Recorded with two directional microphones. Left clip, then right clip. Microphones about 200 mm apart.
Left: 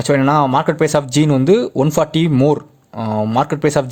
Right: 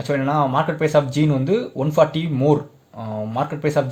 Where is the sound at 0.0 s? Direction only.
50° left (ahead or behind).